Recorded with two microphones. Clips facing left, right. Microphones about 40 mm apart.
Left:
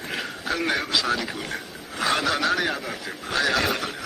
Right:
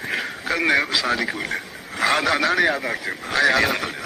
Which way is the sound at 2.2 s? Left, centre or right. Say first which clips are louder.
Right 4 dB; centre.